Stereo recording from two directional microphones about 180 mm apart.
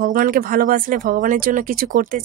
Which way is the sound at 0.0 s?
50° right (ahead or behind).